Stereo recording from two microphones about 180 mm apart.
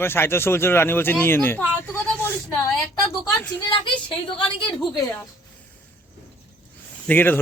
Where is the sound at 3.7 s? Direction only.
30° left (ahead or behind).